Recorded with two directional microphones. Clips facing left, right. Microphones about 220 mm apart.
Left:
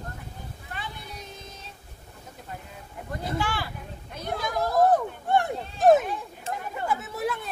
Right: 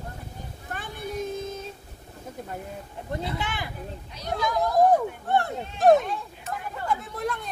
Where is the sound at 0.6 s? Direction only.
50° right (ahead or behind).